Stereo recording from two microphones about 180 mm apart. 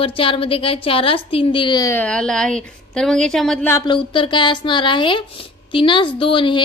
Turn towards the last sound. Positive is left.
turn(degrees=30)  # may be behind; listen again after turning